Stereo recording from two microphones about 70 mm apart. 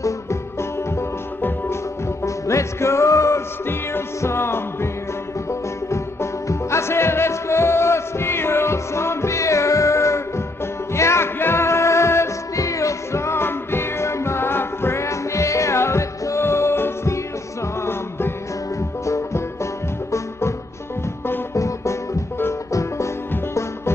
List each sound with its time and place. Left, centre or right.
0.0 s music: left
2.2 s music: left
5.9 s music: left
19.0 s music: left
21.5 s music: left